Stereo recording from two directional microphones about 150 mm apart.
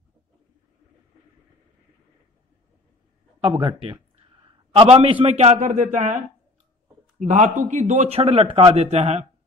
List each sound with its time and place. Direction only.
3.3 s a man's voice: 35° right (ahead or behind)
8.9 s speech: 45° right (ahead or behind)